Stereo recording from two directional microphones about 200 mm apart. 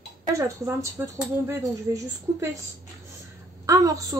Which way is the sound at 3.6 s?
15° right (ahead or behind).